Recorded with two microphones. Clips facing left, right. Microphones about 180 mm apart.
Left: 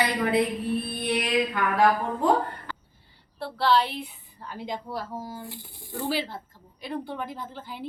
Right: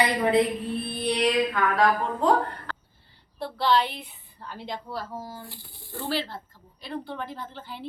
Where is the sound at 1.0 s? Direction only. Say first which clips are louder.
Right 6 dB; 5° left (ahead or behind).